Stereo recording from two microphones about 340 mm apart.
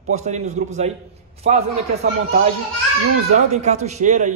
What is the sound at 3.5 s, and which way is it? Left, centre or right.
Speech, centre.